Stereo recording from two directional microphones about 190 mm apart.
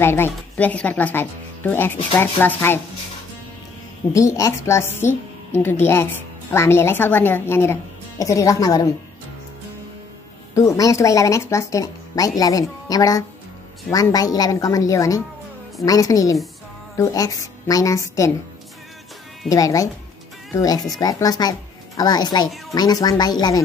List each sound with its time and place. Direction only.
0.0 s a woman's voice: 10° left (ahead or behind)
4.1 s a woman's voice: 15° left (ahead or behind)
10.5 s a woman's voice: 15° left (ahead or behind)
19.5 s a woman's voice: 15° left (ahead or behind)